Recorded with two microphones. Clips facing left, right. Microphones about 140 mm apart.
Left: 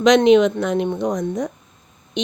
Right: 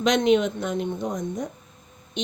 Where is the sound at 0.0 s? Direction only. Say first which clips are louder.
Left 7 dB; 90° left.